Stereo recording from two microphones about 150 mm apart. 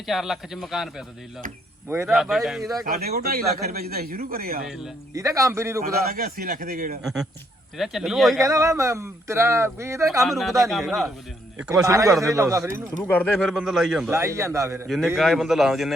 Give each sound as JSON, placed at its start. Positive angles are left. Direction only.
{"t": 0.0, "sound": "a man's voice", "side_deg": 0}
{"t": 2.0, "sound": "a man's voice", "side_deg": 0}
{"t": 2.8, "sound": "a man's voice", "side_deg": -85}
{"t": 5.1, "sound": "speech", "side_deg": -20}
{"t": 5.8, "sound": "a man's voice", "side_deg": -80}
{"t": 7.0, "sound": "a man's voice", "side_deg": 0}
{"t": 8.4, "sound": "speech", "side_deg": -20}
{"t": 10.2, "sound": "a man's voice", "side_deg": 0}
{"t": 11.9, "sound": "speech", "side_deg": -20}
{"t": 13.1, "sound": "a man's voice", "side_deg": 5}
{"t": 14.1, "sound": "speech", "side_deg": -20}
{"t": 14.8, "sound": "a man's voice", "side_deg": 0}